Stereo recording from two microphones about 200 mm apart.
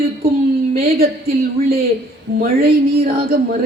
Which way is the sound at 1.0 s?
50° right (ahead or behind).